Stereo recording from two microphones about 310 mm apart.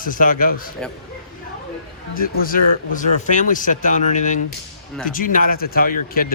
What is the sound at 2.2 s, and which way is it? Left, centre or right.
A man's voice, left.